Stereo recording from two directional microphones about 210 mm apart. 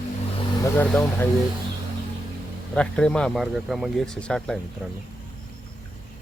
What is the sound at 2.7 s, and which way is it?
Speech, 5° left (ahead or behind).